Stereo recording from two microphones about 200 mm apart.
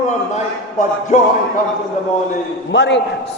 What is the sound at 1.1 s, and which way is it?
Speech, 35° left (ahead or behind).